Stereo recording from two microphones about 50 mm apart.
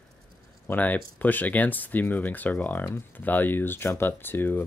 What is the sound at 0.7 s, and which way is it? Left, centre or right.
Speech, left.